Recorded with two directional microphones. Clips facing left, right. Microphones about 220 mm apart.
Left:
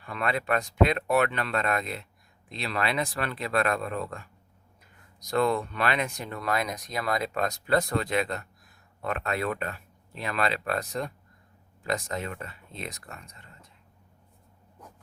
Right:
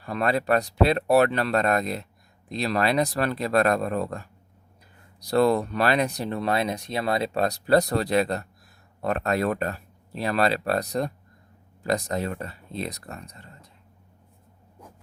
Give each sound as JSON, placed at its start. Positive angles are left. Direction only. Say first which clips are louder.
{"t": 0.0, "sound": "speech", "louder": "right 5 dB", "side_deg": -40}